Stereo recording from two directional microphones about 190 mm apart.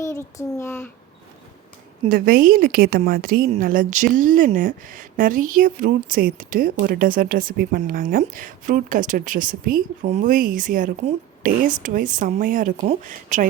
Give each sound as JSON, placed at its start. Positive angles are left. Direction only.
{"t": 0.0, "sound": "a child's voice", "side_deg": 15}
{"t": 2.0, "sound": "speech", "side_deg": -45}